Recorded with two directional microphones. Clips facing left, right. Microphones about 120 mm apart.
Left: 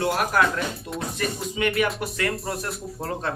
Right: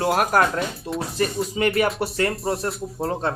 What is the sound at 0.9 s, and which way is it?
A man's voice, 30° right (ahead or behind).